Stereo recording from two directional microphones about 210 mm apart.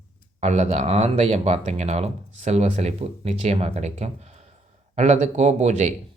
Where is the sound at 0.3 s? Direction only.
30° right (ahead or behind).